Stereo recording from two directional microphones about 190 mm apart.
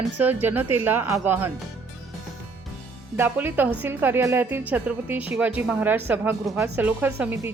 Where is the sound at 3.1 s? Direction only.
10° right (ahead or behind).